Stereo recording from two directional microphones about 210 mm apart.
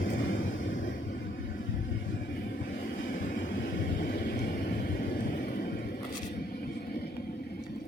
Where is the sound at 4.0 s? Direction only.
45° left (ahead or behind).